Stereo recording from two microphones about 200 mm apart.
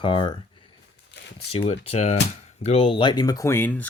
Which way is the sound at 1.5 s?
30° left (ahead or behind).